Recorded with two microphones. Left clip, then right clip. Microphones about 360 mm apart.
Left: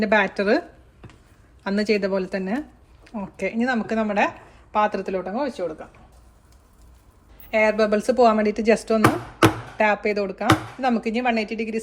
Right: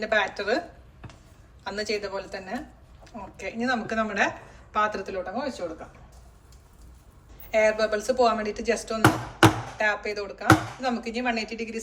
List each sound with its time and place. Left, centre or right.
0.0 s speech: centre
1.6 s a woman's voice: centre
7.5 s a woman's voice: left